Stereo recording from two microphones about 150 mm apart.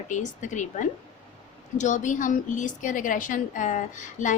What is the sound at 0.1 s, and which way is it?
A woman's voice, 55° left (ahead or behind).